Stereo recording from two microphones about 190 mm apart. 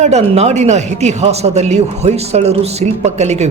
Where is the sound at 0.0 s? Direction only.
35° right (ahead or behind).